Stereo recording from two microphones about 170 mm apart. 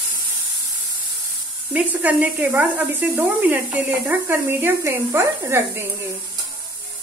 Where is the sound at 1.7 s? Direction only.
10° right (ahead or behind).